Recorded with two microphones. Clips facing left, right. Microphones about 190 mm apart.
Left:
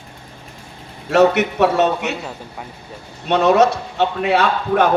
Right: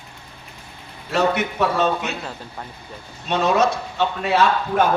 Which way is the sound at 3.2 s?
65° left (ahead or behind).